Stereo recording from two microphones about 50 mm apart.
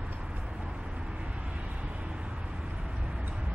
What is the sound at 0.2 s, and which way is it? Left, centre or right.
Vehicle, right.